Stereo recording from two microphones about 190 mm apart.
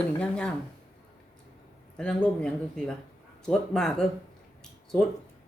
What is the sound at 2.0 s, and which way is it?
A woman's voice, 5° left (ahead or behind).